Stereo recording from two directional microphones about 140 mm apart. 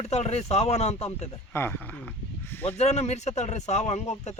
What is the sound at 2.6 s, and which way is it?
Speech, 50° left (ahead or behind).